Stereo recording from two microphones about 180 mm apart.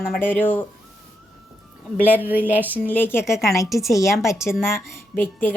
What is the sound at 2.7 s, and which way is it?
A woman's voice, 10° left (ahead or behind).